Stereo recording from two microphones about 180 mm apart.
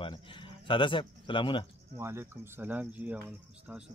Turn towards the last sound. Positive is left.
turn(degrees=-10)  # may be behind; listen again after turning